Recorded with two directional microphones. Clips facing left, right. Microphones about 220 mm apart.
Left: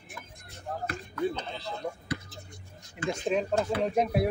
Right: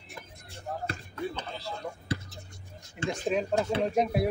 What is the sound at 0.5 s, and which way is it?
Basketball bounce, 30° right (ahead or behind).